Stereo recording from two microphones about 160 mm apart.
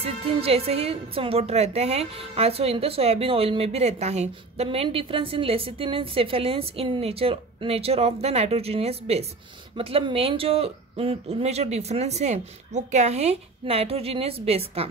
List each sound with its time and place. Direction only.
0.0 s a woman's voice: 35° right (ahead or behind)